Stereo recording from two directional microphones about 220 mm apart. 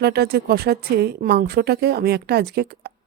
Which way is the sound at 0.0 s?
45° right (ahead or behind).